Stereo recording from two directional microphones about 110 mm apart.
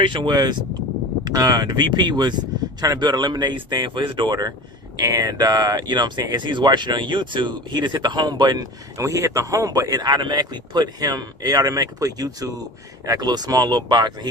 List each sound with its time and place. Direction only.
0.0 s speech: 45° right (ahead or behind)